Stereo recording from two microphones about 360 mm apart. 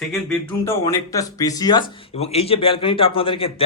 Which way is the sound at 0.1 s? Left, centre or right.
Centre.